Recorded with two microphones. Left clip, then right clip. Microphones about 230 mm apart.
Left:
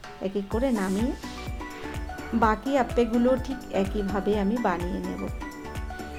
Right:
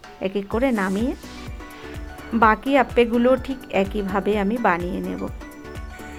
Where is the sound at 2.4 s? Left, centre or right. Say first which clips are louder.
Right 7 dB; right.